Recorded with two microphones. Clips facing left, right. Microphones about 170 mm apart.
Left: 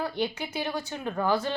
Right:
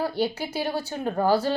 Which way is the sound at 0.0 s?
35° right (ahead or behind).